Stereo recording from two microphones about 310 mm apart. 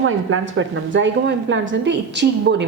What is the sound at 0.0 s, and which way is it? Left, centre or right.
A woman's voice, right.